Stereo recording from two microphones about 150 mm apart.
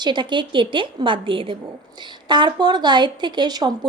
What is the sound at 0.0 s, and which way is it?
Speech, 30° right (ahead or behind).